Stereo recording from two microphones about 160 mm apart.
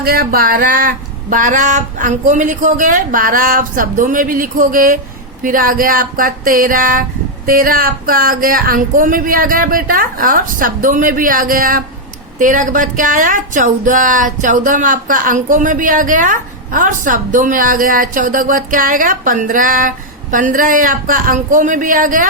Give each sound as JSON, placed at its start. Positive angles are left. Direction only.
{"t": 0.0, "sound": "speech", "side_deg": -70}